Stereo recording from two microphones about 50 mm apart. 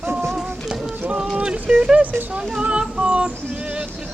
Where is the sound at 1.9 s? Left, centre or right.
Right.